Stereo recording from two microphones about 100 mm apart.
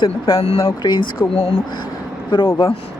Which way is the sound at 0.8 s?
45° left (ahead or behind).